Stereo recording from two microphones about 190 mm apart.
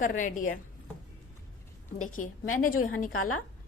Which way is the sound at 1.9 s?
40° left (ahead or behind).